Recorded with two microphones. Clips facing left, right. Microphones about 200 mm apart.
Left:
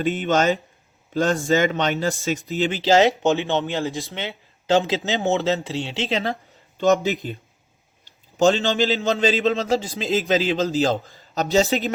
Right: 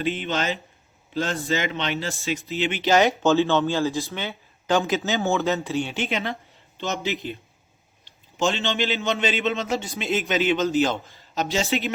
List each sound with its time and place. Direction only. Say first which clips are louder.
0.0 s a man's voice: left 6 dB; 45° left (ahead or behind)
8.4 s a man's voice: left 6 dB; 35° left (ahead or behind)